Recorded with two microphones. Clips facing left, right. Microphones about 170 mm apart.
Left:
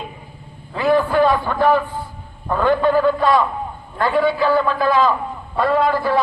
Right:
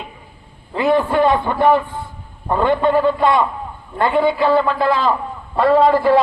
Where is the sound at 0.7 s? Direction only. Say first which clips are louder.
Right 1 dB; 25° right (ahead or behind).